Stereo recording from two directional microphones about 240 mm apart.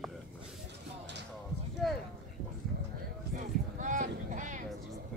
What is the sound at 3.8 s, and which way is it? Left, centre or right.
Boat, right.